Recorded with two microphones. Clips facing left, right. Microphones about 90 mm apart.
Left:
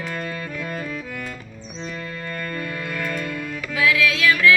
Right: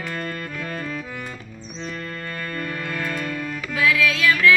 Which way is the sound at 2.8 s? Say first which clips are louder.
Even; 20° right (ahead or behind).